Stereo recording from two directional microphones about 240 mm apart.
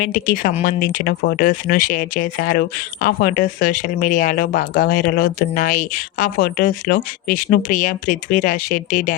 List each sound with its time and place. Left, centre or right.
0.0 s speech: left